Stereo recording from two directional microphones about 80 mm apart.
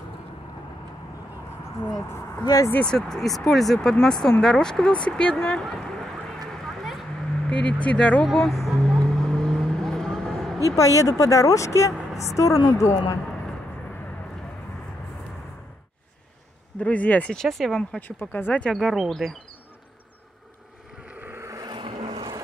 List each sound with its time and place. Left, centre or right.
2.4 s speech: left
2.8 s speech: centre
6.8 s vehicle: centre
7.4 s speech: centre
8.2 s speech: centre
9.1 s vehicle: centre
10.8 s speech: left
16.8 s speech: centre
17.4 s speech: centre
17.9 s speech: left
18.8 s speech: centre
21.1 s vehicle: right
21.4 s a sound: right
21.6 s vehicle: right